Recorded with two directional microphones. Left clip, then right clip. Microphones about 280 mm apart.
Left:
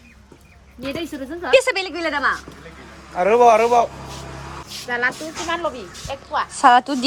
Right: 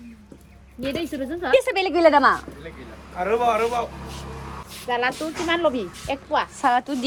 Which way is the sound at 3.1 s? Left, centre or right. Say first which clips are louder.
Left 8 dB; left.